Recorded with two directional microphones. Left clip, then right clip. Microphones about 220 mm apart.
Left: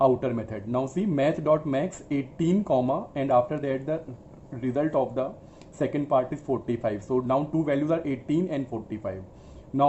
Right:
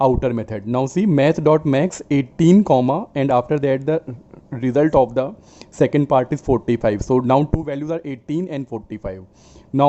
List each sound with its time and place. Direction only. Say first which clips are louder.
0.0 s speech: right 5 dB; 50° right (ahead or behind)